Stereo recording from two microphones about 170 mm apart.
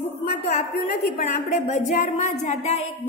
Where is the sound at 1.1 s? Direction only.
60° left (ahead or behind).